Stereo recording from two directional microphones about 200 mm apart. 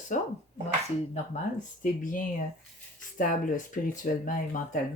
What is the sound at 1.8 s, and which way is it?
Speech, 40° left (ahead or behind).